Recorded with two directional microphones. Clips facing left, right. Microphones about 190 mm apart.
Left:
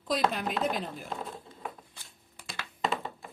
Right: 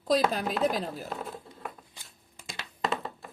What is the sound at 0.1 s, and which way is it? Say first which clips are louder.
Chopping: right 3 dB; 35° right (ahead or behind).